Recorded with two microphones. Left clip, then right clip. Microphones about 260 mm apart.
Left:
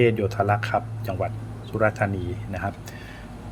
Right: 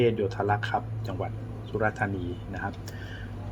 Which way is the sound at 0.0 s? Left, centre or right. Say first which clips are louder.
Left 4 dB; left.